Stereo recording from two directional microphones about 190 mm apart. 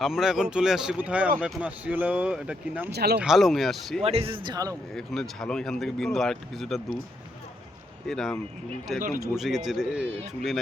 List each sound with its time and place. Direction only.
0.0 s speech: centre (ahead or behind)
2.9 s speech: 60° right (ahead or behind)
3.2 s speech: centre (ahead or behind)
4.0 s speech: 30° right (ahead or behind)
4.9 s speech: 5° left (ahead or behind)
8.0 s speech: centre (ahead or behind)
9.0 s speech: 50° right (ahead or behind)
9.3 s speech: centre (ahead or behind)